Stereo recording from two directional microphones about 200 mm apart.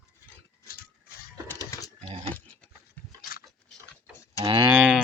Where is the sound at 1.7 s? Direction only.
15° left (ahead or behind).